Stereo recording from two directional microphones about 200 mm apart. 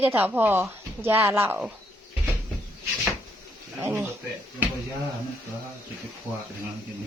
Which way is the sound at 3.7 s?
15° right (ahead or behind).